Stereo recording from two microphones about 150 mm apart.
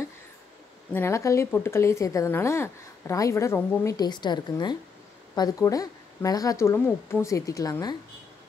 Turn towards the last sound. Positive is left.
turn(degrees=25)  # may be behind; listen again after turning